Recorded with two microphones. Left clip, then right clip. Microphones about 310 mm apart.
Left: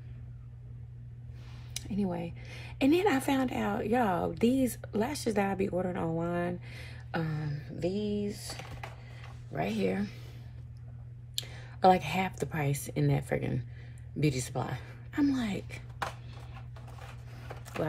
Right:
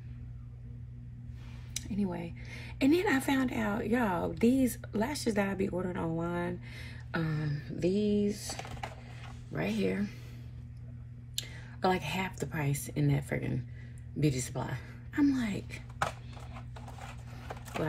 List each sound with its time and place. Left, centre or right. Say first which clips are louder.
1.7 s speech: left 2 dB; centre
9.5 s speech: left 1 dB; centre
11.3 s speech: left 2 dB; centre